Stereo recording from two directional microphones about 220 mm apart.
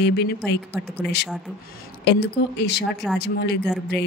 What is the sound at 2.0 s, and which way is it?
A woman's voice, 50° left (ahead or behind).